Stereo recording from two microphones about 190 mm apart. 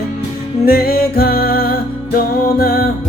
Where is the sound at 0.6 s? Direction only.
55° left (ahead or behind).